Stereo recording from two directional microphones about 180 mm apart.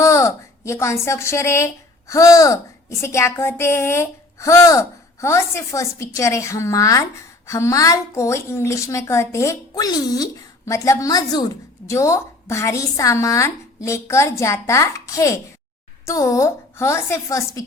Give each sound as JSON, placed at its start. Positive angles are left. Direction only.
{"t": 0.0, "sound": "a woman's voice", "side_deg": 15}